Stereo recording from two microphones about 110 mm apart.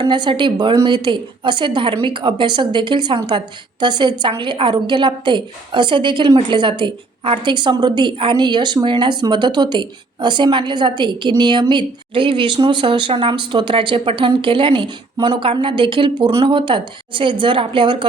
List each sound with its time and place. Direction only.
0.0 s a woman's voice: 45° right (ahead or behind)